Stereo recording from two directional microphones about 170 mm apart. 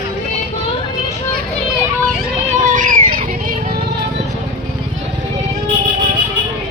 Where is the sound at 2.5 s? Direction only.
50° right (ahead or behind).